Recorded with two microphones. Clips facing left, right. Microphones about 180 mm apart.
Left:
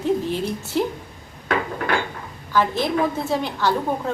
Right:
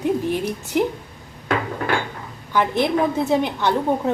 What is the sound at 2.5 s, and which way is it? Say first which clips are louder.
A woman's voice: right 1 dB; 20° right (ahead or behind).